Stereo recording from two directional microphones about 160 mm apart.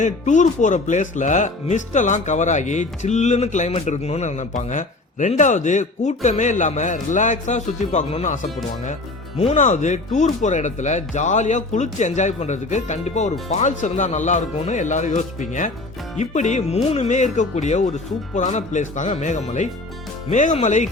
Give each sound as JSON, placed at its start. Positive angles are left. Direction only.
{"t": 0.0, "sound": "a man's voice", "side_deg": 50}